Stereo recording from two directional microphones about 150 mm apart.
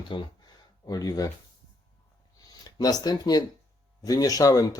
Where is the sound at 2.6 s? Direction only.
25° left (ahead or behind).